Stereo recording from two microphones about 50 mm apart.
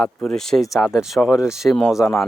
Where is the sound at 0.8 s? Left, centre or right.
Centre.